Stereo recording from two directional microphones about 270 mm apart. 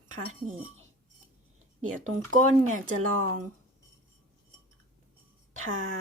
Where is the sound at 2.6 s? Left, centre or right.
Right.